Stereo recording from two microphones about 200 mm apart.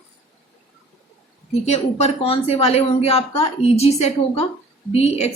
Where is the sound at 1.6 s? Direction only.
35° left (ahead or behind).